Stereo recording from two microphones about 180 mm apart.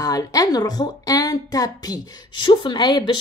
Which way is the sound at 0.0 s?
20° left (ahead or behind).